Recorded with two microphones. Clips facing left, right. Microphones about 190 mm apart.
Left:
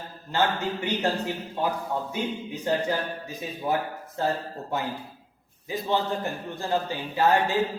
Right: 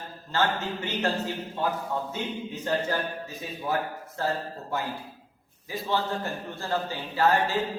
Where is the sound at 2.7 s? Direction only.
15° left (ahead or behind).